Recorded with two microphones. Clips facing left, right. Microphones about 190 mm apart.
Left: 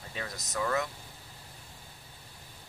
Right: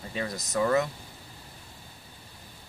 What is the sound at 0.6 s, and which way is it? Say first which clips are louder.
Speech: right 6 dB; 15° right (ahead or behind).